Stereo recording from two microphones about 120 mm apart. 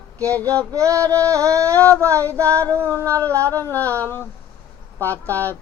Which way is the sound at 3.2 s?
15° left (ahead or behind).